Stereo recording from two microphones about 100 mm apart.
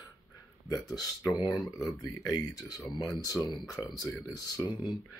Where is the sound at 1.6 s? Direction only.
35° left (ahead or behind).